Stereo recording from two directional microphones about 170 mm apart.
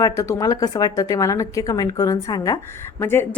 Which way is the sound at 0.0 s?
20° left (ahead or behind).